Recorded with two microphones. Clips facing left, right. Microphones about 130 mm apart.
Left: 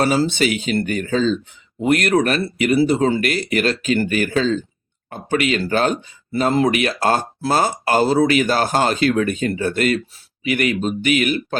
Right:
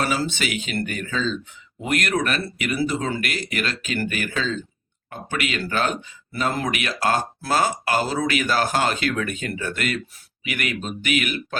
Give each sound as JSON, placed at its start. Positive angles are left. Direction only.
{"t": 0.0, "sound": "speech", "side_deg": 35}